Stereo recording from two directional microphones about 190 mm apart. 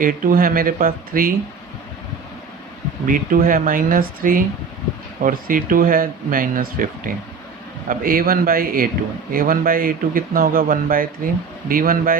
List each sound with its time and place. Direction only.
0.0 s speech: 45° right (ahead or behind)
3.1 s speech: 45° right (ahead or behind)